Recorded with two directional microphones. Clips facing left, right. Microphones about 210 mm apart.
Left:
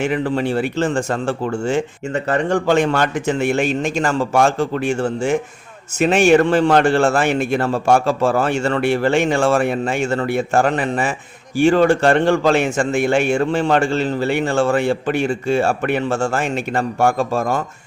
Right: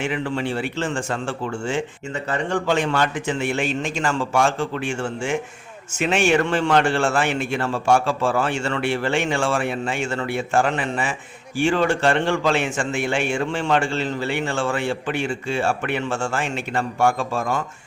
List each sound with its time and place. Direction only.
0.0 s a man's voice: 40° left (ahead or behind)